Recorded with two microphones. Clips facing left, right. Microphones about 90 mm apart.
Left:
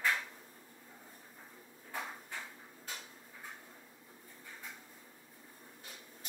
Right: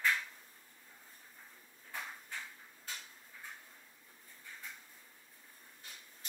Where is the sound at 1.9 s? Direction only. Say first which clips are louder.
Left 3 dB; 20° left (ahead or behind).